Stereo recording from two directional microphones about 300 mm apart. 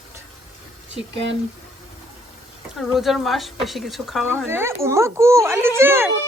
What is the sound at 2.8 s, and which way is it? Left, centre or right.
A child's voice, centre.